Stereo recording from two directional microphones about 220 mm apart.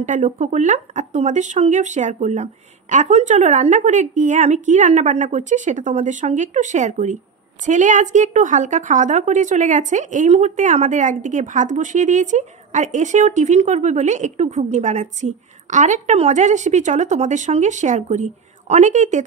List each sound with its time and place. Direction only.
0.0 s a woman's voice: 35° right (ahead or behind)